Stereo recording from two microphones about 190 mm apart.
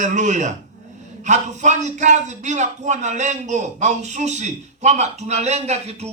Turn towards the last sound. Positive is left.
turn(degrees=-35)  # may be behind; listen again after turning